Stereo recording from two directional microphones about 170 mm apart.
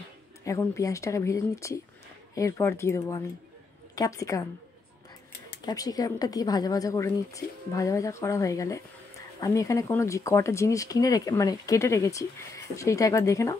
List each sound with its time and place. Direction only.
0.5 s speech: 20° left (ahead or behind)
5.7 s speech: 20° left (ahead or behind)